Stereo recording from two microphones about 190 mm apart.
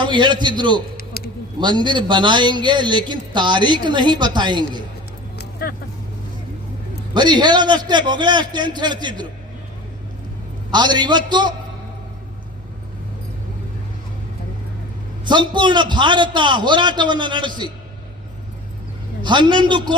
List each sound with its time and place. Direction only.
0.0 s a man's voice: 25° right (ahead or behind)
0.9 s a sound: 50° left (ahead or behind)
1.5 s a man's voice: 25° right (ahead or behind)
5.4 s vehicle: 55° left (ahead or behind)
7.1 s a man's voice: 25° right (ahead or behind)
10.7 s a man's voice: 25° right (ahead or behind)
15.2 s a man's voice: 25° right (ahead or behind)
19.2 s a man's voice: 25° right (ahead or behind)